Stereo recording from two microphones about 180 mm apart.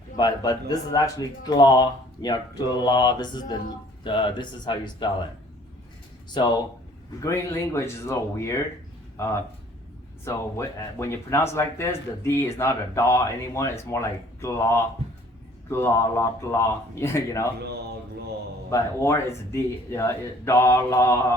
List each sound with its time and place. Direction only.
0.2 s speech: 20° left (ahead or behind)
6.4 s speech: 25° left (ahead or behind)
10.2 s speech: 15° left (ahead or behind)
18.7 s speech: 15° left (ahead or behind)